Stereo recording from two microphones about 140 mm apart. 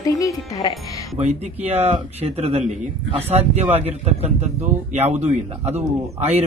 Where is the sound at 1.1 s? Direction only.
50° right (ahead or behind).